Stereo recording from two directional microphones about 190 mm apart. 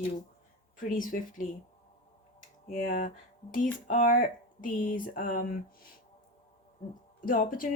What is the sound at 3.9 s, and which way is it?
Speech, 45° left (ahead or behind).